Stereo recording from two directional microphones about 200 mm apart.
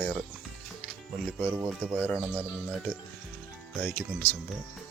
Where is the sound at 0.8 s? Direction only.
Centre (ahead or behind).